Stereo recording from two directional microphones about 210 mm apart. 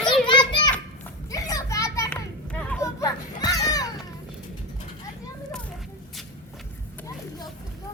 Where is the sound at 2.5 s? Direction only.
5° left (ahead or behind).